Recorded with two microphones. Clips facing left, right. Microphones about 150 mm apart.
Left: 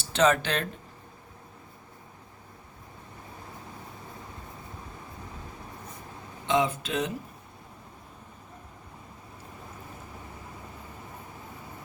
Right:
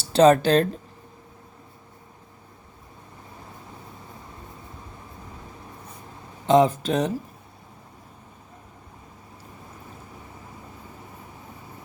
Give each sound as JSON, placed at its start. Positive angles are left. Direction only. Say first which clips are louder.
{"t": 0.1, "sound": "speech", "louder": "right 8 dB", "side_deg": -35}
{"t": 6.4, "sound": "speech", "louder": "right 8 dB", "side_deg": -35}